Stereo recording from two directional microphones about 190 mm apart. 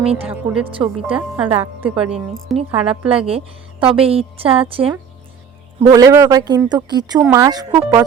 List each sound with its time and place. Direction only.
0.0 s speech: 30° right (ahead or behind)
0.3 s speech: 5° right (ahead or behind)
0.7 s a woman's voice: 30° right (ahead or behind)
1.1 s a woman's voice: 5° right (ahead or behind)
2.6 s a woman's voice: 30° right (ahead or behind)
5.9 s a woman's voice: 15° right (ahead or behind)
7.2 s speech: 10° right (ahead or behind)
7.4 s a woman's voice: 20° right (ahead or behind)